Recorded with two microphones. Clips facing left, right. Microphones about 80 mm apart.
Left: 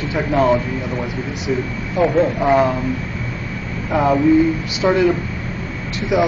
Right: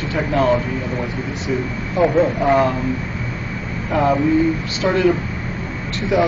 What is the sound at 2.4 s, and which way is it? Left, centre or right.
Speech, centre.